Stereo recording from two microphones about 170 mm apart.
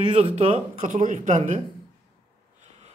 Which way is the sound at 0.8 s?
50° right (ahead or behind).